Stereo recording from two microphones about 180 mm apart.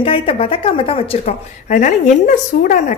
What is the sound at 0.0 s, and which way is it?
Speech, 30° left (ahead or behind).